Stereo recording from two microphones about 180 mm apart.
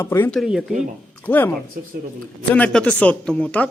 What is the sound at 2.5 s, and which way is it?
Speech, 5° left (ahead or behind).